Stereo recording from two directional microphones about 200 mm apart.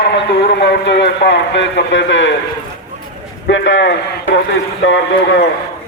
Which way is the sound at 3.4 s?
65° left (ahead or behind).